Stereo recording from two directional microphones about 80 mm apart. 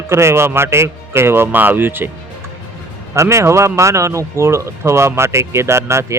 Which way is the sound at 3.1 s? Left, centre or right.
Right.